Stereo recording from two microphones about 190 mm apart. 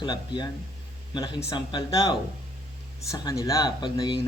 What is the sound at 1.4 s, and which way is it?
A man's voice, 20° left (ahead or behind).